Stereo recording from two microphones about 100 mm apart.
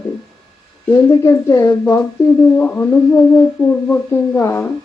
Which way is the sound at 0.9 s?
25° left (ahead or behind).